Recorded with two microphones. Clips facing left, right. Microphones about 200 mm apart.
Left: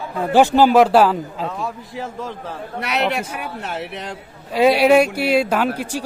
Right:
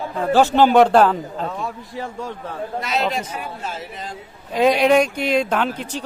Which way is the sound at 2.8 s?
65° left (ahead or behind).